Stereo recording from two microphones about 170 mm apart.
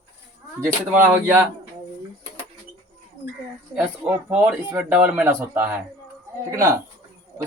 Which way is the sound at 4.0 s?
10° right (ahead or behind).